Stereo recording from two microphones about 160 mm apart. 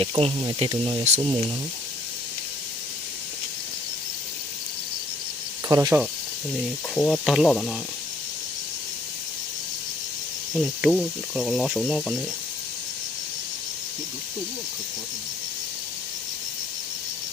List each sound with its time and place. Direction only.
0.0 s speech: 35° right (ahead or behind)
5.6 s speech: 20° right (ahead or behind)
6.9 s speech: 5° left (ahead or behind)
10.5 s speech: centre (ahead or behind)